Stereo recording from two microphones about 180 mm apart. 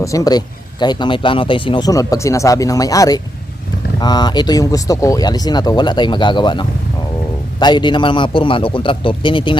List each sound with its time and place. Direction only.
0.0 s speech: 20° left (ahead or behind)